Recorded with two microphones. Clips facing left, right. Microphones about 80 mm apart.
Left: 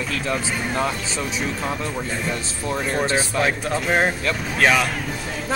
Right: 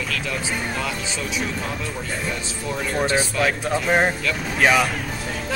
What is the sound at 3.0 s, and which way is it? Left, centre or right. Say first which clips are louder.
Speech: even; left.